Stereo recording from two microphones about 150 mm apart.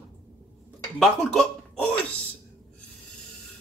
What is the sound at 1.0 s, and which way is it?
Speech, centre (ahead or behind).